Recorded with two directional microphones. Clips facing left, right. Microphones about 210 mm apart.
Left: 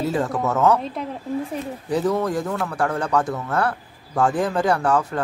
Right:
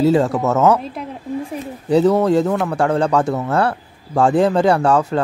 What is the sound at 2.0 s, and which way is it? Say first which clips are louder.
Speech: right 8 dB; 65° right (ahead or behind).